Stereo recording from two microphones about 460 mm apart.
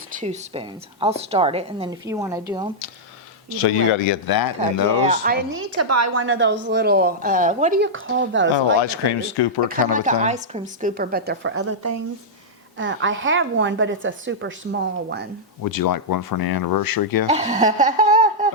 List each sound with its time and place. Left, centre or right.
0.2 s a woman's voice: centre
3.6 s speech: left
4.3 s speech: left
5.0 s a woman's voice: centre
8.5 s speech: left
9.9 s a woman's voice: centre
15.6 s speech: left
17.2 s speech: centre